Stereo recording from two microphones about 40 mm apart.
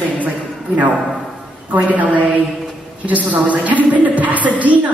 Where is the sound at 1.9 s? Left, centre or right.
Right.